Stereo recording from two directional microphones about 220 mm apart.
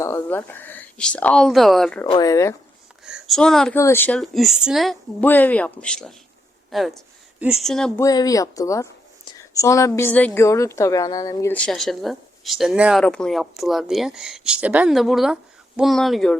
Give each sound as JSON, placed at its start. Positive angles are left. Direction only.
{"t": 0.0, "sound": "speech", "side_deg": 10}
{"t": 2.0, "sound": "speech", "side_deg": 20}
{"t": 3.0, "sound": "a woman's voice", "side_deg": 0}
{"t": 8.0, "sound": "a woman's voice", "side_deg": 15}